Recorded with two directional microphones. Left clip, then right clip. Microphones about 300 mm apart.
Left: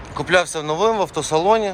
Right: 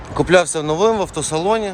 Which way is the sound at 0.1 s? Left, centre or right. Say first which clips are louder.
Right 4 dB; centre.